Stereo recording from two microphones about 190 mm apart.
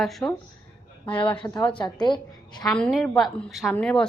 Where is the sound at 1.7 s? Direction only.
25° left (ahead or behind).